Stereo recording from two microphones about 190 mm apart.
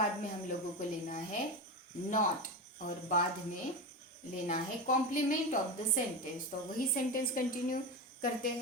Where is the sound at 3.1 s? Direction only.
45° left (ahead or behind).